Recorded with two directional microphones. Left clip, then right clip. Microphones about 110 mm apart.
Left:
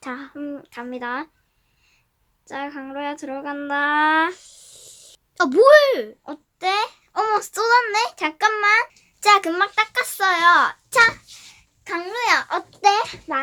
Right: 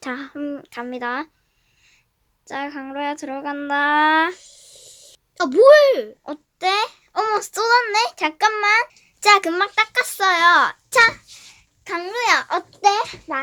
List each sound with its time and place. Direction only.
0.0 s speech: 60° right (ahead or behind)
2.5 s a child's voice: 45° right (ahead or behind)
4.4 s a sound: 40° left (ahead or behind)
6.2 s a child's voice: 40° right (ahead or behind)
11.8 s speech: 50° right (ahead or behind)
12.8 s a child's voice: centre (ahead or behind)